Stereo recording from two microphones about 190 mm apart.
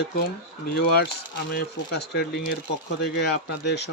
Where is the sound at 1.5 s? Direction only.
60° left (ahead or behind).